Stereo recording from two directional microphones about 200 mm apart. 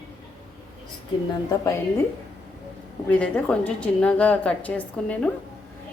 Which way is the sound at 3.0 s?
5° left (ahead or behind).